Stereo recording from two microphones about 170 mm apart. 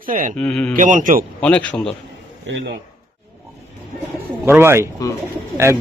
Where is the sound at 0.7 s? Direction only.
50° right (ahead or behind).